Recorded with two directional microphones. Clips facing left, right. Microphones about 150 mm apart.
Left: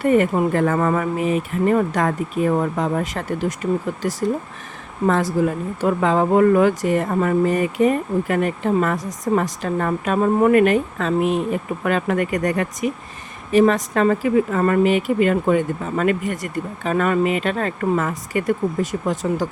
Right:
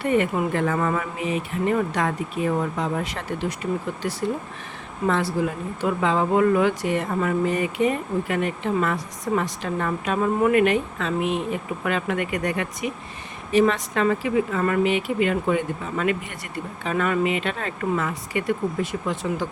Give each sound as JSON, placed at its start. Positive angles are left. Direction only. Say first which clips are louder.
{"t": 0.0, "sound": "speech", "louder": "left 5 dB", "side_deg": 45}